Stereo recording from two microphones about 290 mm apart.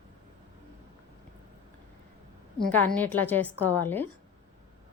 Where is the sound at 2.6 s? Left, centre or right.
Centre.